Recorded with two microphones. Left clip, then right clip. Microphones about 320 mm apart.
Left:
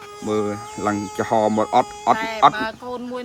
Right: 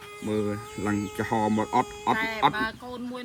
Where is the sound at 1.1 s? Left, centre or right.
Centre.